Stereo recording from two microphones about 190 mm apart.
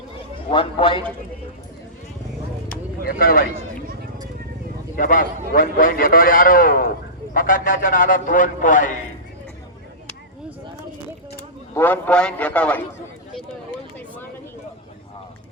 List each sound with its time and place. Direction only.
0.5 s a man's voice: 30° left (ahead or behind)
3.0 s speech: 50° left (ahead or behind)
4.9 s a man's voice: 45° left (ahead or behind)
11.3 s a man's voice: 10° left (ahead or behind)